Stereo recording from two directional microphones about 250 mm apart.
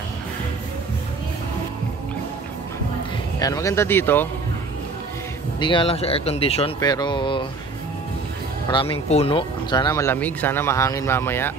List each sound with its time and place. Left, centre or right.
3.3 s speech: centre
5.6 s speech: centre
8.6 s speech: left